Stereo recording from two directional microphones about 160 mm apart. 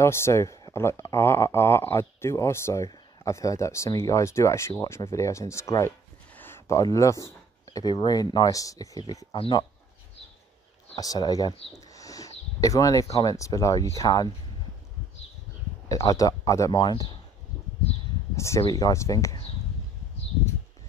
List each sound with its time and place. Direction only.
0.0 s speech: 15° left (ahead or behind)
11.0 s speech: 25° left (ahead or behind)
16.1 s speech: 20° left (ahead or behind)
18.3 s speech: 20° left (ahead or behind)